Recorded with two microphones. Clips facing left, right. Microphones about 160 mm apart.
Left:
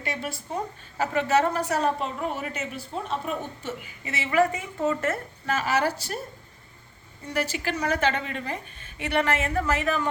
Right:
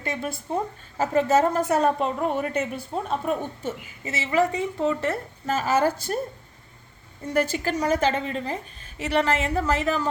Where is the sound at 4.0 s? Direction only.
25° right (ahead or behind).